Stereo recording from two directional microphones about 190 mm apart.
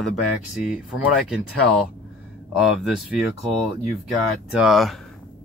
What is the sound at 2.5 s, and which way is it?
Speech, centre (ahead or behind).